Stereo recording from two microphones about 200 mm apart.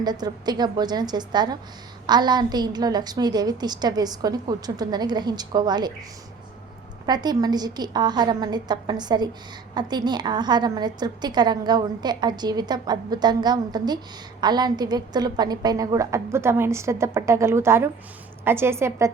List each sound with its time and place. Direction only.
0.0 s a woman's voice: 20° right (ahead or behind)
7.0 s a woman's voice: 20° right (ahead or behind)